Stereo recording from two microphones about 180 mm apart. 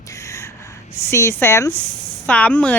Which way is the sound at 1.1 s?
15° left (ahead or behind).